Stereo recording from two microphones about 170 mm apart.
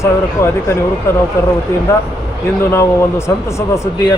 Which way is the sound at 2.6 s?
15° left (ahead or behind).